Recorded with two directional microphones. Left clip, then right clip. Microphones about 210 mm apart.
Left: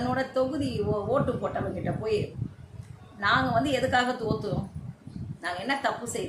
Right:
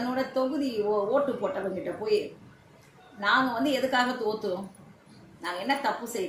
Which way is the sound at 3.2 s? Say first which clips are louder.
Even; 15° left (ahead or behind).